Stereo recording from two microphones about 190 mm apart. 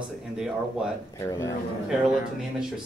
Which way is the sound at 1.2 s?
20° left (ahead or behind).